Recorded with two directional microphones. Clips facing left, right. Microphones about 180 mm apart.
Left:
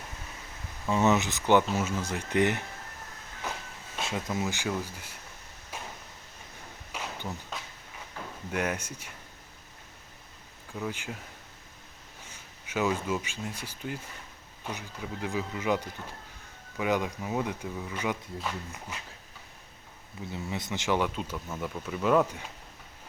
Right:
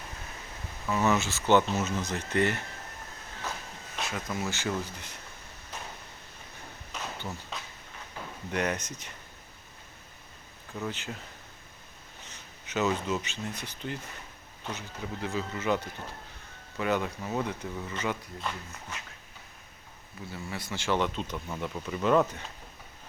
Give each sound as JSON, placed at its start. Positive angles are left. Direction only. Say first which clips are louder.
{"t": 0.9, "sound": "speech", "louder": "left 2 dB", "side_deg": 25}
{"t": 4.0, "sound": "speech", "louder": "left 2 dB", "side_deg": 20}
{"t": 5.7, "sound": "a sound", "louder": "left 1 dB", "side_deg": 10}
{"t": 6.9, "sound": "a sound", "louder": "left 1 dB", "side_deg": 10}
{"t": 8.4, "sound": "speech", "louder": "right 1 dB", "side_deg": 5}
{"t": 10.8, "sound": "speech", "louder": "even", "side_deg": 10}
{"t": 12.2, "sound": "speech", "louder": "even", "side_deg": 10}
{"t": 20.2, "sound": "speech", "louder": "left 3 dB", "side_deg": 20}